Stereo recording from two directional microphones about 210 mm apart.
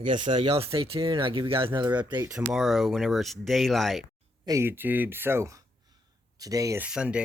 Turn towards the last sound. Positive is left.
turn(degrees=-5)  # may be behind; listen again after turning